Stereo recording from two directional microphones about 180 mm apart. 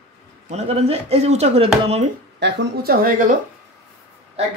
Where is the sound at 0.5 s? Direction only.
35° right (ahead or behind).